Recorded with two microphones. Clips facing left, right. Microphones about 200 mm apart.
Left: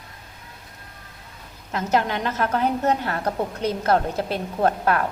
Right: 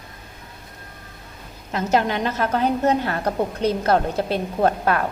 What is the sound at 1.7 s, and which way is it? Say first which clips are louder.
A woman's voice: right 2 dB; 25° right (ahead or behind).